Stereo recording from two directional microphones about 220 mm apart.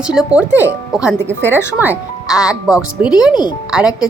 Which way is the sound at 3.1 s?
20° left (ahead or behind).